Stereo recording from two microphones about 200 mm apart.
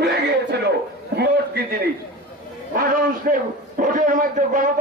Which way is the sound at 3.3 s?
40° right (ahead or behind).